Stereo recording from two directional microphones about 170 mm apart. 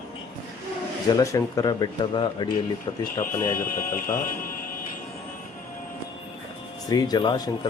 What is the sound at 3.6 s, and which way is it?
Speech, 55° left (ahead or behind).